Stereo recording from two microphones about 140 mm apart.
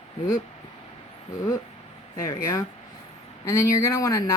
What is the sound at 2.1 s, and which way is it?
Speech, 25° left (ahead or behind).